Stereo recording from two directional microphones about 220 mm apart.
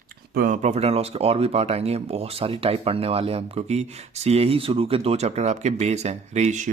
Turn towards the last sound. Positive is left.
turn(degrees=-30)  # may be behind; listen again after turning